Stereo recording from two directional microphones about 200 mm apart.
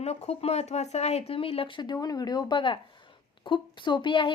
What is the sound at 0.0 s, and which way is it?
Speech, 30° left (ahead or behind).